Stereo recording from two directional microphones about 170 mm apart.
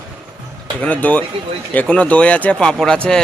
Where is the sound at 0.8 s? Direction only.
10° left (ahead or behind).